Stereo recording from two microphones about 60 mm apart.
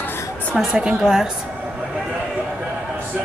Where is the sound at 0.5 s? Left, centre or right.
Centre.